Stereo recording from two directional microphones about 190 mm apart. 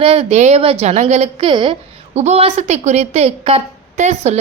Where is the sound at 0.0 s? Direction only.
30° right (ahead or behind).